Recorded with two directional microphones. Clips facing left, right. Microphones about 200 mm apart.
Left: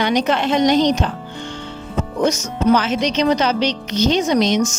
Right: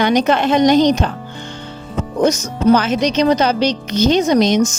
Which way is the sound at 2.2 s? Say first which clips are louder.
Right 3 dB; 40° right (ahead or behind).